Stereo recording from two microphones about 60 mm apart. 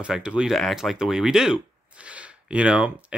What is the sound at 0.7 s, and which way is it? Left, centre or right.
Speech, centre.